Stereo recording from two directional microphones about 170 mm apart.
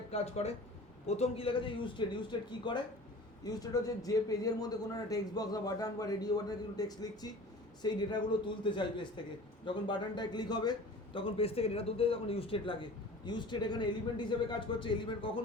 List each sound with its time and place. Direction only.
0.1 s a man's voice: 40° left (ahead or behind)